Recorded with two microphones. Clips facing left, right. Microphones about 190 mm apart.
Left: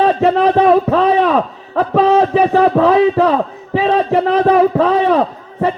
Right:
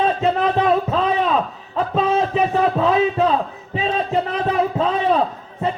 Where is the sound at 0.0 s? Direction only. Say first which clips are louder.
Left 6 dB; 70° left (ahead or behind).